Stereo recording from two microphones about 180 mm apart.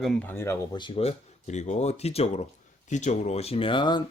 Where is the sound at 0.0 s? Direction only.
5° left (ahead or behind).